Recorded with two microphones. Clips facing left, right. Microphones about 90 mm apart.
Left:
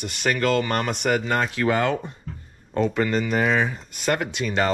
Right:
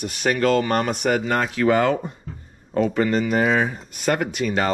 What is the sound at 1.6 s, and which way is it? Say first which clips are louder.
Speech: right 5 dB; 40° right (ahead or behind).